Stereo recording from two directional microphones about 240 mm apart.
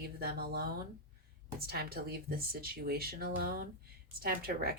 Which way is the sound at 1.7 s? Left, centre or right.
Right.